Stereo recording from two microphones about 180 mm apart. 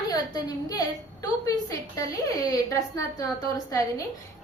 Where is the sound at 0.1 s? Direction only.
20° left (ahead or behind).